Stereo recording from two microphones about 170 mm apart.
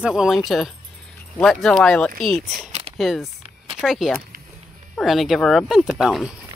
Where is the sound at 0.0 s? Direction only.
5° right (ahead or behind).